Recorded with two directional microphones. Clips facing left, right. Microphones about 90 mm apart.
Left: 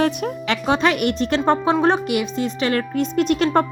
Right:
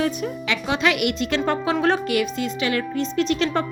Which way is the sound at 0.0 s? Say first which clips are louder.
Left 3 dB; 60° left (ahead or behind).